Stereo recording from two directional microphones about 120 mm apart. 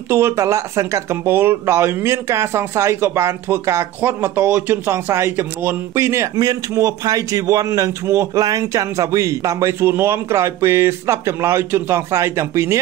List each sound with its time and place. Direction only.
0.1 s speech: 20° right (ahead or behind)